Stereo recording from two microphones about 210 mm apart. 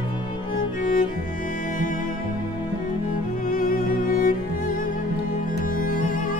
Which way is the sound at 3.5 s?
40° left (ahead or behind).